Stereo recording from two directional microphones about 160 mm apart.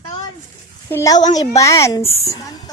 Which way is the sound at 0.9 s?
20° left (ahead or behind).